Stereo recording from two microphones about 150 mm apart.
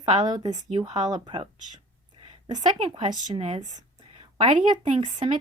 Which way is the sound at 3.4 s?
40° right (ahead or behind).